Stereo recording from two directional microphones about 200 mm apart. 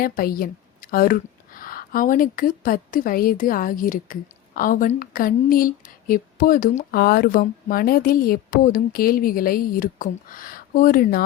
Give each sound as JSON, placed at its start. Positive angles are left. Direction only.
{"t": 0.0, "sound": "a woman's voice", "side_deg": 45}